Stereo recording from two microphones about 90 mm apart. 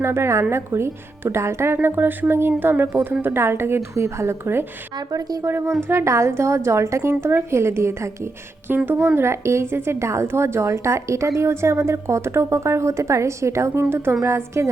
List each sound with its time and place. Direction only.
0.0 s speech: 30° right (ahead or behind)
4.9 s a woman's voice: 40° right (ahead or behind)
5.5 s a woman's voice: 25° right (ahead or behind)